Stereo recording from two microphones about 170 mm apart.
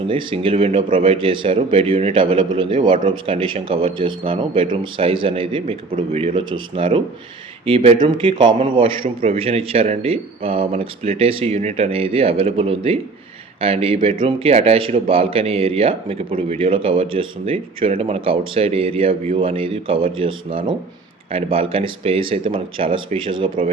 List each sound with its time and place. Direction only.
0.1 s a man's voice: 30° right (ahead or behind)